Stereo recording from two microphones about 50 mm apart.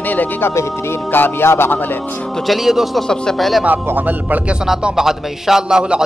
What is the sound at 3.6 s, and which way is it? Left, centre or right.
Speech, right.